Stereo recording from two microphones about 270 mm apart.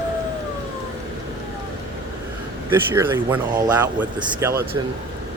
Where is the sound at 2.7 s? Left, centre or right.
Centre.